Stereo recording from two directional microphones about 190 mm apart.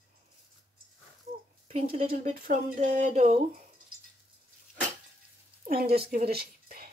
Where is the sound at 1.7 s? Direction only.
35° right (ahead or behind).